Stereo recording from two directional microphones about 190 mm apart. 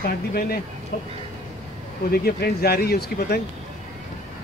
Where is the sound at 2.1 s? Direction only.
55° left (ahead or behind).